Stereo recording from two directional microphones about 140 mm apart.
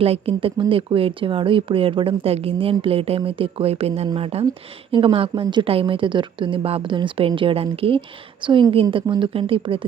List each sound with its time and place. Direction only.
0.0 s speech: 45° right (ahead or behind)